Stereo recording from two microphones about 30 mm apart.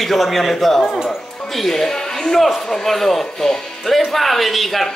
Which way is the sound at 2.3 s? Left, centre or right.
Centre.